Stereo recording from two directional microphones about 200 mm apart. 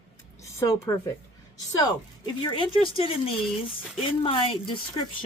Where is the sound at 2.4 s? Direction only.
25° left (ahead or behind).